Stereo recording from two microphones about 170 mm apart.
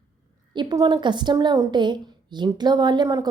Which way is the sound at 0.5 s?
25° right (ahead or behind).